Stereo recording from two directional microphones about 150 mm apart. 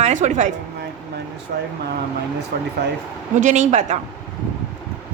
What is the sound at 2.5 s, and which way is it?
Speech, 90° right.